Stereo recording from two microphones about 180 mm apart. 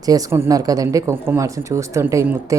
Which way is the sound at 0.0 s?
20° right (ahead or behind).